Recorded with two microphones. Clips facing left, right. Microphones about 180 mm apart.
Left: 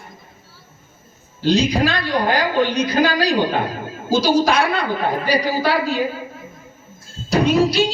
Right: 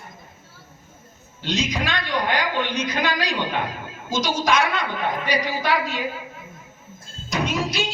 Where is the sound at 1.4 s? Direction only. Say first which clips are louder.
Left 9 dB; 35° left (ahead or behind).